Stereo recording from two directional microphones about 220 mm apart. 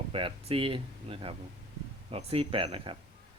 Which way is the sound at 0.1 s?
25° right (ahead or behind).